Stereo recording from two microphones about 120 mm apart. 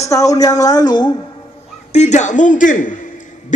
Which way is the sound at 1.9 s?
75° left (ahead or behind).